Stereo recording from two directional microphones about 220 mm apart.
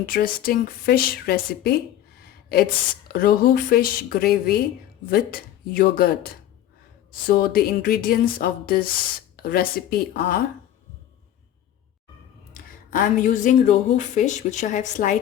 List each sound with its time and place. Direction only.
0.0 s speech: 45° left (ahead or behind)
3.1 s speech: 40° left (ahead or behind)
12.5 s speech: 40° left (ahead or behind)